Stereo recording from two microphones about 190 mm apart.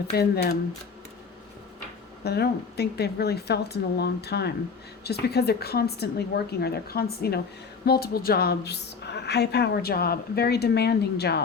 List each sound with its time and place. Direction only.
0.1 s a woman's voice: 60° left (ahead or behind)
2.2 s a woman's voice: 60° left (ahead or behind)